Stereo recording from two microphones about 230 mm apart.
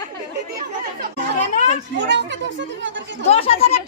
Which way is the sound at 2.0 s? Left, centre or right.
Right.